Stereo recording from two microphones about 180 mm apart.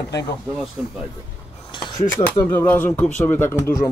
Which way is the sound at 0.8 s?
5° right (ahead or behind).